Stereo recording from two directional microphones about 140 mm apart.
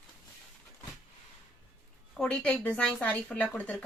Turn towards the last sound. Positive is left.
turn(degrees=10)  # may be behind; listen again after turning